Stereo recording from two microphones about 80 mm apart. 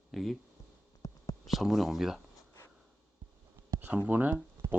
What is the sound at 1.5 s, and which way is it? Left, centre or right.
Speech, centre.